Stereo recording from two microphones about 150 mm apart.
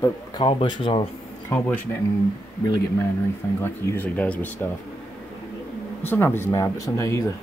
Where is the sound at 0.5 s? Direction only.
35° left (ahead or behind).